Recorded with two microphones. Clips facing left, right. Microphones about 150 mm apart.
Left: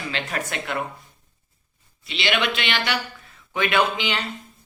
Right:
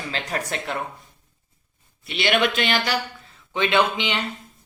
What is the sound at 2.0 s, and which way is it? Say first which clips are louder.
Speech: right 3 dB; 55° right (ahead or behind).